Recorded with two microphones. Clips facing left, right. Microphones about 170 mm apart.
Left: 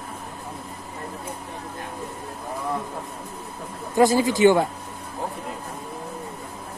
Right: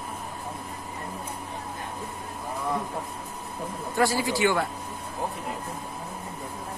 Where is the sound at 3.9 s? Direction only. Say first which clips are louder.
Left 7 dB; 20° left (ahead or behind).